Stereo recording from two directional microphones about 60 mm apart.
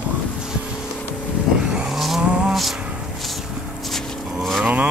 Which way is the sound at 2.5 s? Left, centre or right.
Centre.